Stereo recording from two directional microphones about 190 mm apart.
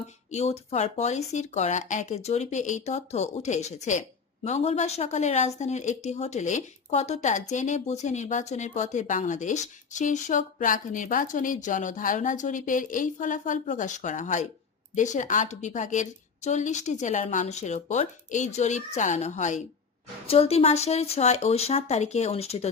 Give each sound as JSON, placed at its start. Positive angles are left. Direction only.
{"t": 0.3, "sound": "speech", "side_deg": 35}